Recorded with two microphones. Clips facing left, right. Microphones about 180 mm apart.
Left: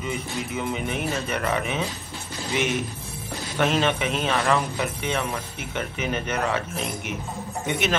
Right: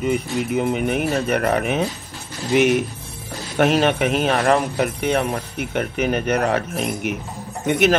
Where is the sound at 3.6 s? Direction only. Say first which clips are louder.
Right 6 dB; 50° right (ahead or behind).